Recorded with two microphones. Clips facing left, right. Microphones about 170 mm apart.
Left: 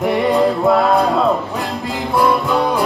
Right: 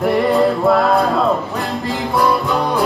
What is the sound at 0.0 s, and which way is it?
Music, centre (ahead or behind).